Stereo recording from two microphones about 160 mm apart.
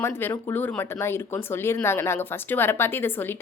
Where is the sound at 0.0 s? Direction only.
15° left (ahead or behind).